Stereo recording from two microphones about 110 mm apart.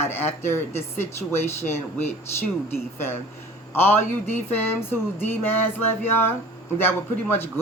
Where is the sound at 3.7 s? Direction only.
20° left (ahead or behind).